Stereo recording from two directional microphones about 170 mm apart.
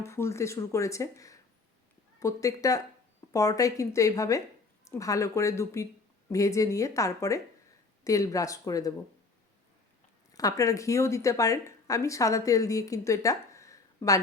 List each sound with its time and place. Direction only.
0.0 s a woman's voice: 15° left (ahead or behind)
10.3 s speech: 20° left (ahead or behind)